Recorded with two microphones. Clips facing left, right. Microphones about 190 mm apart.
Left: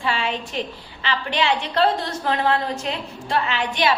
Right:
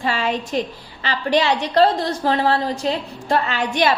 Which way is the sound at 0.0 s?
40° right (ahead or behind).